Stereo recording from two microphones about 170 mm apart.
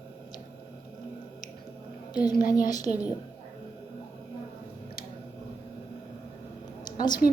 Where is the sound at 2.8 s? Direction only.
10° right (ahead or behind).